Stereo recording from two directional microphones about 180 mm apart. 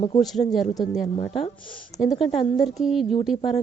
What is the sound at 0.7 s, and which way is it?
Speech, 20° left (ahead or behind).